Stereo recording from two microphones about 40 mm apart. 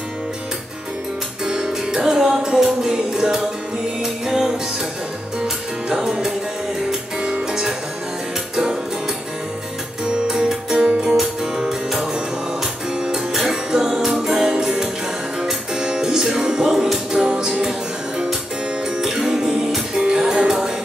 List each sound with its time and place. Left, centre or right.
1.4 s music: centre
5.9 s music: centre
10.0 s music: centre
13.0 s music: centre
18.9 s music: centre